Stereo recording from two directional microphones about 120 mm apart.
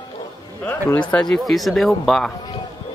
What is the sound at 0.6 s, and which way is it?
Speech, 15° left (ahead or behind).